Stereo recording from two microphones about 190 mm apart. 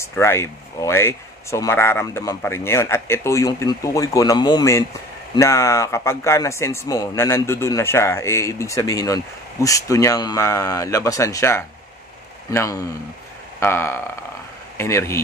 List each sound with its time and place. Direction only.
0.0 s speech: 15° left (ahead or behind)